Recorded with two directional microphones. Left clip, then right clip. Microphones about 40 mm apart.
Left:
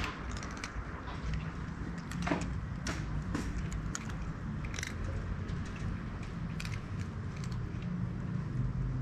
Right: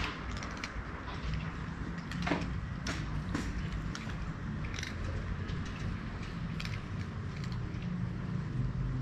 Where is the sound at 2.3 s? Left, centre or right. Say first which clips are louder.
Even; left.